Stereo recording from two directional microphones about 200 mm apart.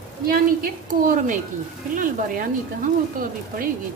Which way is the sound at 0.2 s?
45° right (ahead or behind).